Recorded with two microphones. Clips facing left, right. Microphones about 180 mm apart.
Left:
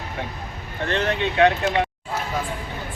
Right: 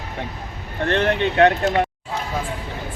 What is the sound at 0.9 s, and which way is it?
Speech, 60° right (ahead or behind).